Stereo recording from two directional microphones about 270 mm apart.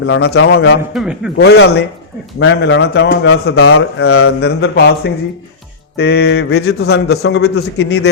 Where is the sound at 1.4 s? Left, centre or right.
Left.